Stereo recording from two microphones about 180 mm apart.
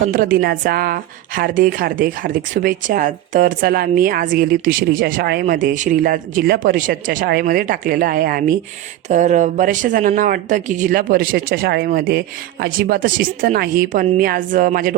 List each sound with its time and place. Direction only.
0.1 s a woman's voice: 50° right (ahead or behind)
9.0 s a woman's voice: 40° right (ahead or behind)